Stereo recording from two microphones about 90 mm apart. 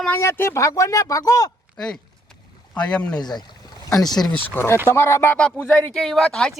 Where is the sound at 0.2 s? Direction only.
30° left (ahead or behind).